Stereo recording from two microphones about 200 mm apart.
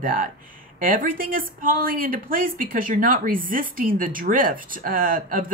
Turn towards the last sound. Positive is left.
turn(degrees=-45)  # may be behind; listen again after turning